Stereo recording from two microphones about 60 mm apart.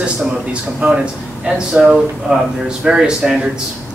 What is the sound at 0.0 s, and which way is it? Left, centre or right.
A man's voice, centre.